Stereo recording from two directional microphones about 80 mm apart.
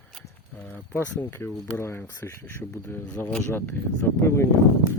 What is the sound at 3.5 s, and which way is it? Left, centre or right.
Speech, left.